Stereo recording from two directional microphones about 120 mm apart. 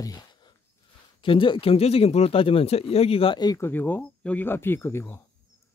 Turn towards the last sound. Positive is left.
turn(degrees=20)  # may be behind; listen again after turning